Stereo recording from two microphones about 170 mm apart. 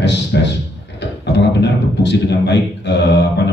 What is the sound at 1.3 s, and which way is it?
A man's voice, 85° left.